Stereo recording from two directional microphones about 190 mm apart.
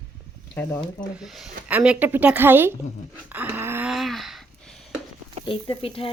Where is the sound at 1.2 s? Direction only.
Centre (ahead or behind).